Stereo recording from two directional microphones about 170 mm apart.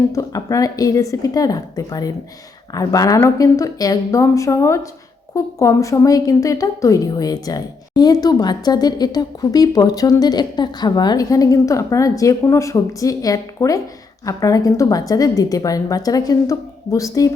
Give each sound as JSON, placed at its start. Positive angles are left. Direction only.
{"t": 0.1, "sound": "speech", "side_deg": 20}